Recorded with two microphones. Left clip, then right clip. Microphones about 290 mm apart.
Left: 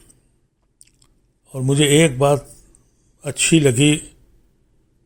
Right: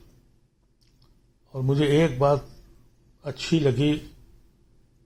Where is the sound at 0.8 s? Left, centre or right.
Left.